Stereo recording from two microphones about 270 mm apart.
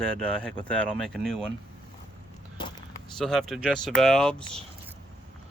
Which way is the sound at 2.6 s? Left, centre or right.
Centre.